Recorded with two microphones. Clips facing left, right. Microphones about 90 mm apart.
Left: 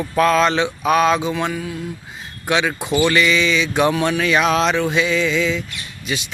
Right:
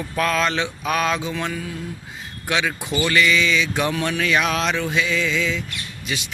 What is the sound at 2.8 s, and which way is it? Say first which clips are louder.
Speech: left 6 dB; 65° left (ahead or behind).